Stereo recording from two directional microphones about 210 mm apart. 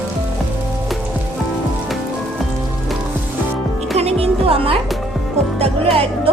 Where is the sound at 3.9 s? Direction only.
30° right (ahead or behind).